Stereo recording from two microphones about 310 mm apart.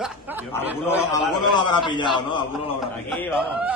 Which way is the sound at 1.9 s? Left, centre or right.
Centre.